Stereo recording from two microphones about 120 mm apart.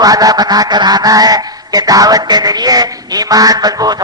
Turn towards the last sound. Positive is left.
turn(degrees=-35)  # may be behind; listen again after turning